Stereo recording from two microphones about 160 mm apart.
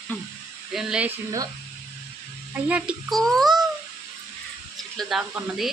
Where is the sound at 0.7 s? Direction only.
5° right (ahead or behind).